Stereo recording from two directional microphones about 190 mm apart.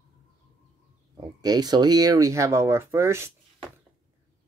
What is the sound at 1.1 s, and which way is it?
Speech, 20° right (ahead or behind).